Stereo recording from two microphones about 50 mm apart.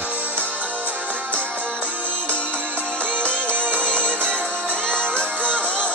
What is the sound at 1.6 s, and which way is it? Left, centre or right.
Music, right.